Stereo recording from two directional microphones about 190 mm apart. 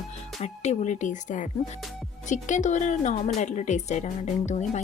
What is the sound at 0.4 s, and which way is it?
A woman's voice, 35° left (ahead or behind).